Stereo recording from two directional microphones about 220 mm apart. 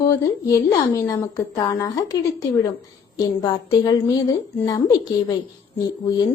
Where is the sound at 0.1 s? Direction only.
15° left (ahead or behind).